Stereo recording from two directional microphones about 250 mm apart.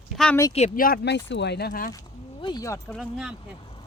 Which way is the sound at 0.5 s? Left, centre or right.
Left.